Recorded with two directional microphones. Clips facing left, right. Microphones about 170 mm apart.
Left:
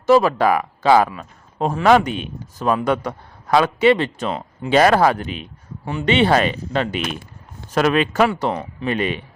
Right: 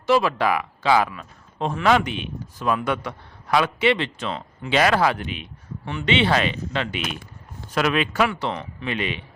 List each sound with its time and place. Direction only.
0.0 s a man's voice: 45° left (ahead or behind)